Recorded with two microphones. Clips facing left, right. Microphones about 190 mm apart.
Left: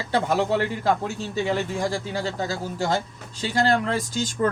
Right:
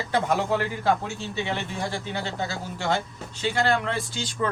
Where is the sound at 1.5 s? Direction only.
40° left (ahead or behind).